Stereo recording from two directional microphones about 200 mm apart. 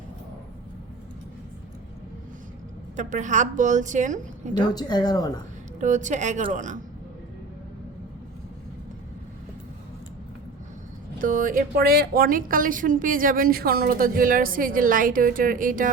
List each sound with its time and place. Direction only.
2.9 s a woman's voice: 40° right (ahead or behind)
4.6 s a woman's voice: 20° left (ahead or behind)
5.8 s a woman's voice: 40° right (ahead or behind)
11.2 s a woman's voice: 40° right (ahead or behind)